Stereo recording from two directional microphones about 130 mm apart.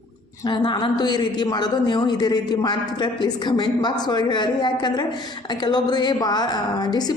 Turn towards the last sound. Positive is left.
turn(degrees=30)  # may be behind; listen again after turning